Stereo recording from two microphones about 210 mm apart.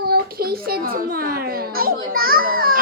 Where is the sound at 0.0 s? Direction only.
45° right (ahead or behind).